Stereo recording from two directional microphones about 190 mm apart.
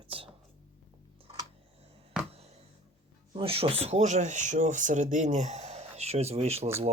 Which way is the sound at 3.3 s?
30° right (ahead or behind).